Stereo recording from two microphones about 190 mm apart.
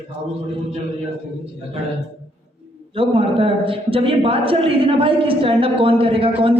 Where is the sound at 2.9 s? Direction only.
30° right (ahead or behind).